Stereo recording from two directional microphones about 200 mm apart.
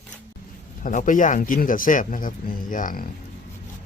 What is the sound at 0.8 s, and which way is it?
Speech, 40° left (ahead or behind).